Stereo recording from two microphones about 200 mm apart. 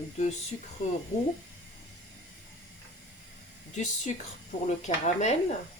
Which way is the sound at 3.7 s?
35° left (ahead or behind).